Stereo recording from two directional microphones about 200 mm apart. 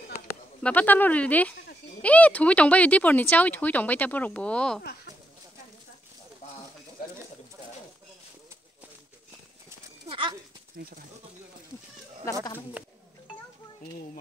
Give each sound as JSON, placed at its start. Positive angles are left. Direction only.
{"t": 0.6, "sound": "speech", "side_deg": 5}
{"t": 9.7, "sound": "clip-clop", "side_deg": -25}
{"t": 10.8, "sound": "speech", "side_deg": -50}